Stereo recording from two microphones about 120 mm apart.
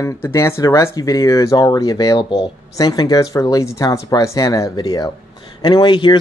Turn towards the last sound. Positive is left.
turn(degrees=40)  # may be behind; listen again after turning